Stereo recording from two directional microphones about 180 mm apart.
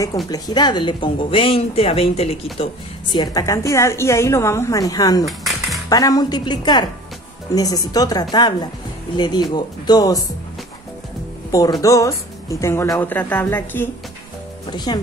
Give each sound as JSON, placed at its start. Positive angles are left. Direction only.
{"t": 0.3, "sound": "speech", "side_deg": 25}
{"t": 5.2, "sound": "a sound", "side_deg": 0}
{"t": 5.9, "sound": "speech", "side_deg": 20}
{"t": 11.5, "sound": "a woman's voice", "side_deg": 20}
{"t": 14.9, "sound": "speech", "side_deg": 25}